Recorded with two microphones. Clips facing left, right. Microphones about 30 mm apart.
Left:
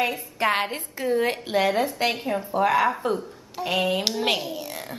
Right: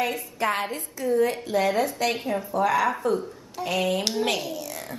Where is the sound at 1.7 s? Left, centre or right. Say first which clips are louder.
Left 1 dB; left.